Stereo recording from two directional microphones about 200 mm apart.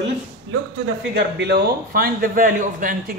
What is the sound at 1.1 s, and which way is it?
A man's voice, 55° right (ahead or behind).